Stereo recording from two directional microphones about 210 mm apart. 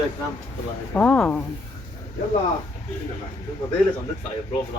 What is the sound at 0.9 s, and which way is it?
Speech, 5° left (ahead or behind).